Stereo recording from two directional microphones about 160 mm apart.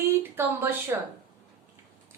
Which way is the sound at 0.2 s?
15° right (ahead or behind).